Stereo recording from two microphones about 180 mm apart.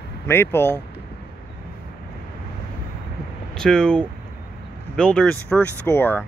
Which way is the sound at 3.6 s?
5° left (ahead or behind).